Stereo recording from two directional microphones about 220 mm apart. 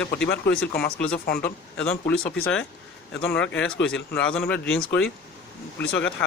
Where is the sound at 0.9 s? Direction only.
5° left (ahead or behind).